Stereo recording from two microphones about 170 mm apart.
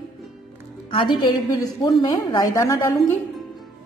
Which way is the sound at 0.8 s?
30° left (ahead or behind).